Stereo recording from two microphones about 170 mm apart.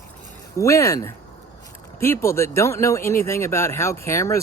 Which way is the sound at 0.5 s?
20° left (ahead or behind).